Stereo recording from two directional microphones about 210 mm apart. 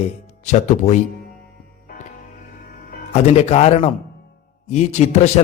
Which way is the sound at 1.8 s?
40° left (ahead or behind).